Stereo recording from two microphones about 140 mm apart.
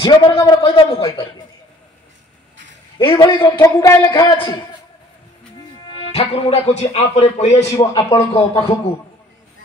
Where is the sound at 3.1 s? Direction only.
20° left (ahead or behind).